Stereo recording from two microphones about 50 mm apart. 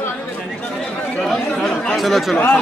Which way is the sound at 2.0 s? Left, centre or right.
Centre.